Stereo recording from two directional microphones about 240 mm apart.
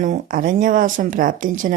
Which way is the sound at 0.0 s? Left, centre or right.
Right.